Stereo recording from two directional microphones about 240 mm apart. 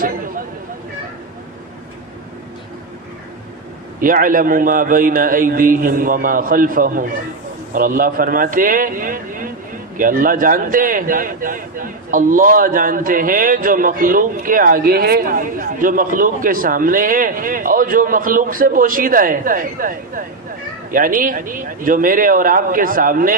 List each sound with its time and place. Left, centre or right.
0.0 s chatter: right
4.0 s speech: right